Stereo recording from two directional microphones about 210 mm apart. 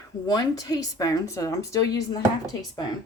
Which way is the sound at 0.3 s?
20° left (ahead or behind).